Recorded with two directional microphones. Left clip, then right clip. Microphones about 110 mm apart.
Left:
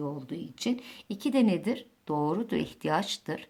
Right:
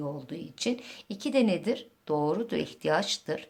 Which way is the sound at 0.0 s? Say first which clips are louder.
Even; 25° left (ahead or behind).